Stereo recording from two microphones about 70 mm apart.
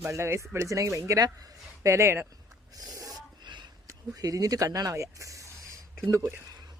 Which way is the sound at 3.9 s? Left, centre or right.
Right.